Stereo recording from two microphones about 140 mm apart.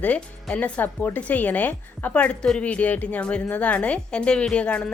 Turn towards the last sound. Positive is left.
turn(degrees=10)  # may be behind; listen again after turning